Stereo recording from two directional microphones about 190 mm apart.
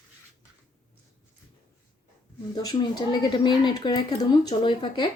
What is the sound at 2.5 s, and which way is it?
Speech, 20° left (ahead or behind).